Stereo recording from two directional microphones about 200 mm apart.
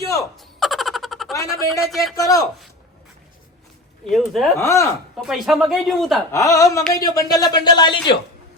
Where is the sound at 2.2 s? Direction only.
15° left (ahead or behind).